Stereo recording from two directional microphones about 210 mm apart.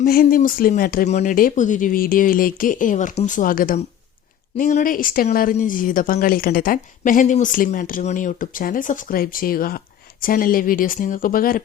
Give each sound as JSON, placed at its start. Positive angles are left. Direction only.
{"t": 0.0, "sound": "speech", "side_deg": 45}